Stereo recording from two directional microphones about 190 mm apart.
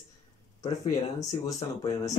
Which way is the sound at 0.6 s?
20° left (ahead or behind).